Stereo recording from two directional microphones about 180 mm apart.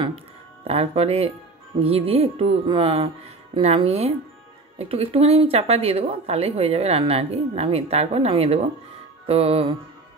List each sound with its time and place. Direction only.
0.7 s speech: 35° right (ahead or behind)